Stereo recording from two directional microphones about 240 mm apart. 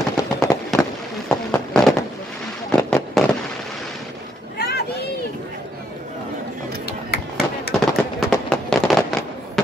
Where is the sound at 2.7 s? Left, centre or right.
Centre.